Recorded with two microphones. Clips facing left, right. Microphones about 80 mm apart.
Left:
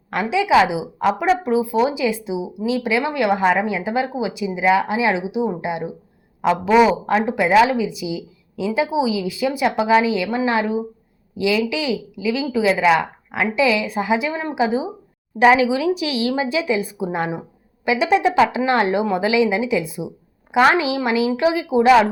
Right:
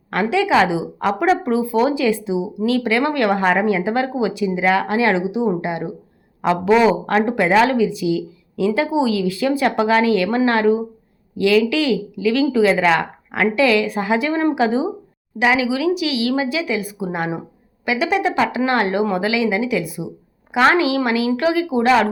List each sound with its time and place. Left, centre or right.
0.1 s speech: centre
6.4 s speech: centre
6.7 s speech: centre
15.4 s a woman's voice: left; by 22.0 s centre